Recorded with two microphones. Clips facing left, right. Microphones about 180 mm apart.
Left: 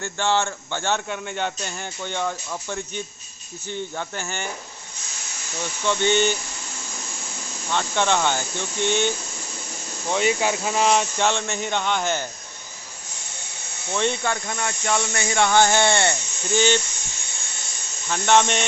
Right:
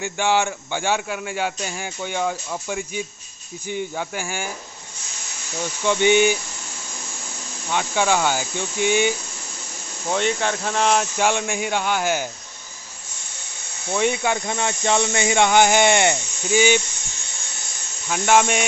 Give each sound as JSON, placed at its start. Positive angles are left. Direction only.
{"t": 0.0, "sound": "speech", "side_deg": -15}
{"t": 5.9, "sound": "speech", "side_deg": -15}
{"t": 7.7, "sound": "speech", "side_deg": -10}
{"t": 10.0, "sound": "speech", "side_deg": 5}
{"t": 13.9, "sound": "speech", "side_deg": -10}
{"t": 14.4, "sound": "speech", "side_deg": -25}
{"t": 18.0, "sound": "speech", "side_deg": -5}